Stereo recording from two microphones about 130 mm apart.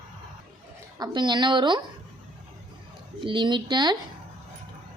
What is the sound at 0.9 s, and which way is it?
Speech, 35° right (ahead or behind).